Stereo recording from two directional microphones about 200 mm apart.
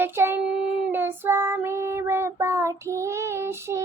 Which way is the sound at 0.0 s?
10° right (ahead or behind).